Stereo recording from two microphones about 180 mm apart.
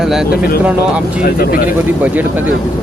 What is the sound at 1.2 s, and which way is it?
Speech, 55° left (ahead or behind).